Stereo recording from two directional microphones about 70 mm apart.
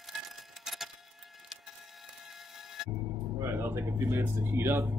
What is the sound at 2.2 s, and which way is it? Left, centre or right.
Printer, centre.